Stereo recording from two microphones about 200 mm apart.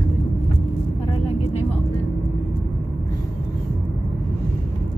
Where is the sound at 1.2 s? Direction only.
30° left (ahead or behind).